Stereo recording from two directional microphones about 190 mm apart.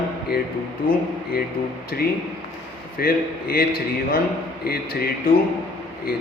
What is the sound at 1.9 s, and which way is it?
A man's voice, 50° left (ahead or behind).